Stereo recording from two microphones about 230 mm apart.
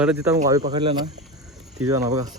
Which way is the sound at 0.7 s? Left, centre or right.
Centre.